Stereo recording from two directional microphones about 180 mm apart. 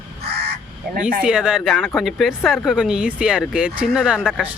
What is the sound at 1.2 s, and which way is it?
Speech, 5° right (ahead or behind).